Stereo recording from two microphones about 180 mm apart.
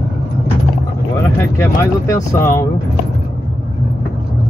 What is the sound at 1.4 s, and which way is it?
Speech, 15° left (ahead or behind).